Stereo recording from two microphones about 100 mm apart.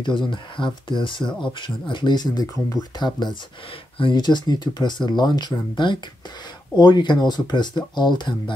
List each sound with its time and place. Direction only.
0.0 s speech: 55° left (ahead or behind)